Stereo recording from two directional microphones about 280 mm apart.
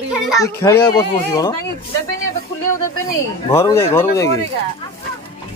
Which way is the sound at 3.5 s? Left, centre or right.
Centre.